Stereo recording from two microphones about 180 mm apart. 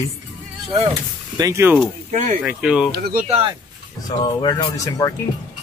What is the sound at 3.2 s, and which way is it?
Speech, 35° right (ahead or behind).